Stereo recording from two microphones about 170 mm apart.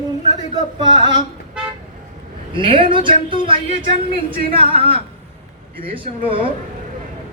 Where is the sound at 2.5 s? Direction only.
30° right (ahead or behind).